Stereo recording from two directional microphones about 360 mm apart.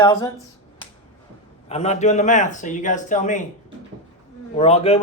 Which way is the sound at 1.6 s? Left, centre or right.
Centre.